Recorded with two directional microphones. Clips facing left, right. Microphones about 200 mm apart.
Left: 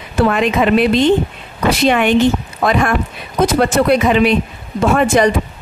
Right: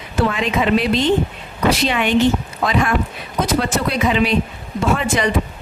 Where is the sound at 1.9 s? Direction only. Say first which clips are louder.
Left 6 dB; 55° left (ahead or behind).